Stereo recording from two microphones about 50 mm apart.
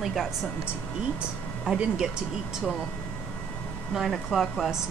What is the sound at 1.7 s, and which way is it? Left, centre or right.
Speech, centre.